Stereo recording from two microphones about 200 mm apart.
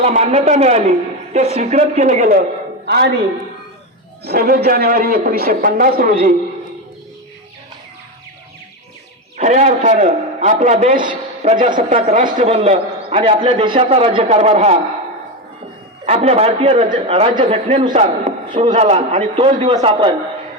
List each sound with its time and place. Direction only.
0.0 s a man's voice: 35° right (ahead or behind)
2.8 s a woman's voice: 55° right (ahead or behind)
4.2 s a man's voice: 50° right (ahead or behind)
9.4 s a man's voice: 35° right (ahead or behind)
11.4 s a man's voice: 30° right (ahead or behind)
16.0 s a man's voice: 30° right (ahead or behind)